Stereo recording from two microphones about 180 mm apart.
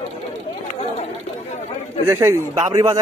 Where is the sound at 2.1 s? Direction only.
15° right (ahead or behind).